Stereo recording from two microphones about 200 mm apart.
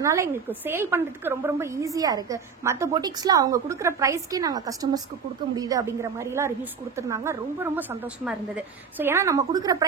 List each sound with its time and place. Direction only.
0.0 s a woman's voice: 15° right (ahead or behind)